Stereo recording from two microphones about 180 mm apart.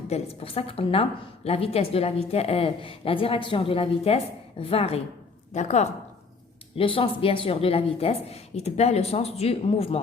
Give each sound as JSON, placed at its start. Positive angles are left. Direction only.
{"t": 0.1, "sound": "speech", "side_deg": 35}